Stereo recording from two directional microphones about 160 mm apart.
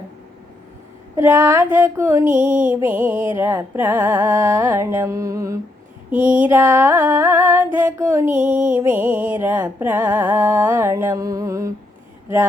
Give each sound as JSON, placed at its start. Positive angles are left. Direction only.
{"t": 1.1, "sound": "music", "side_deg": -15}
{"t": 2.3, "sound": "music", "side_deg": -55}
{"t": 2.6, "sound": "music", "side_deg": -10}